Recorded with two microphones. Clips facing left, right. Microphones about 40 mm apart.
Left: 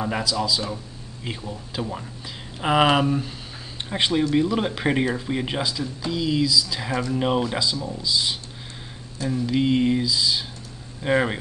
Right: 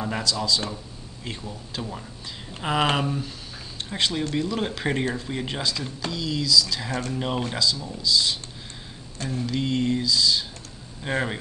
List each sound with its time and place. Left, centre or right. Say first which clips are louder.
0.0 s speech: left 2 dB; centre